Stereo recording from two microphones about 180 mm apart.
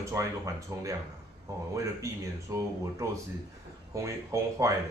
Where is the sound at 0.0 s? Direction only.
15° right (ahead or behind).